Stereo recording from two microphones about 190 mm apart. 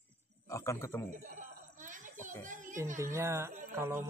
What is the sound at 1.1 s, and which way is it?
Chuckle, 40° right (ahead or behind).